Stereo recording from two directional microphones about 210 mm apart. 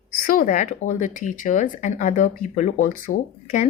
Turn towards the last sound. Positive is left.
turn(degrees=40)  # may be behind; listen again after turning